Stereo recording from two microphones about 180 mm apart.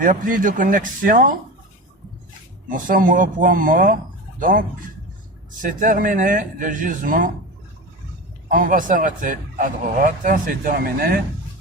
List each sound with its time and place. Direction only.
0.0 s speech: 50° right (ahead or behind)
2.6 s speech: 45° right (ahead or behind)
5.6 s speech: 50° right (ahead or behind)
8.4 s speech: 50° right (ahead or behind)